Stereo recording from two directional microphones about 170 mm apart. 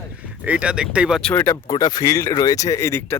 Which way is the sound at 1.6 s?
25° left (ahead or behind).